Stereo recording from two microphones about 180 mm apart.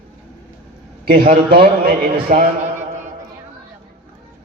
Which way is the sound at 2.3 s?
45° right (ahead or behind).